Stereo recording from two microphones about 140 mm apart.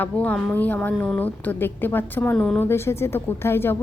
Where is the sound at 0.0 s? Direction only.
10° left (ahead or behind).